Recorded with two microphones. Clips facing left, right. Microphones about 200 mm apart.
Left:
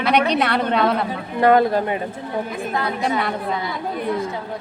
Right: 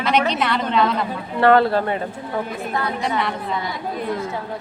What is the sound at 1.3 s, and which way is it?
Speech, 15° left (ahead or behind).